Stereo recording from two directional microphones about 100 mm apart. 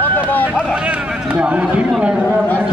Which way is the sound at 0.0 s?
20° left (ahead or behind).